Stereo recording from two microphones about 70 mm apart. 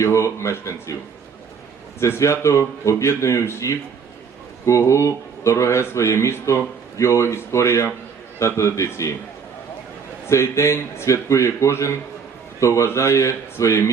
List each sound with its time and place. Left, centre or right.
0.0 s speech: left
2.0 s speech: left
4.9 s speech: left
10.2 s speech: left